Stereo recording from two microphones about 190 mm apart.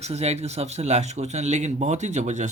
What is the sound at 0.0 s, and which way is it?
Speech, 35° right (ahead or behind).